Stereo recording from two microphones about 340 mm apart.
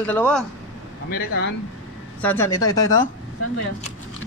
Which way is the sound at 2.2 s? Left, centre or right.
Centre.